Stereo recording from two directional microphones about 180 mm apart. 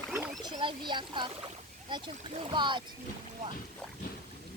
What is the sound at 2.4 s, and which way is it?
Speech, 25° right (ahead or behind).